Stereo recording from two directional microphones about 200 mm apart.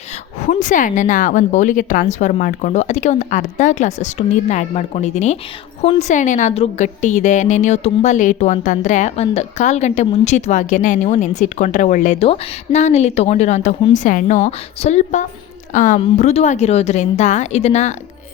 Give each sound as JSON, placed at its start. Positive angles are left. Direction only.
{"t": 0.4, "sound": "a woman's voice", "side_deg": 40}